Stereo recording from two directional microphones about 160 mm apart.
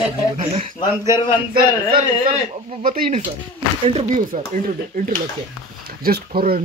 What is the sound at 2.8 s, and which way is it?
Speech, 55° right (ahead or behind).